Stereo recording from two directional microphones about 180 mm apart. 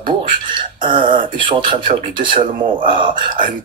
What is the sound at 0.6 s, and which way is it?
Speech, 30° right (ahead or behind).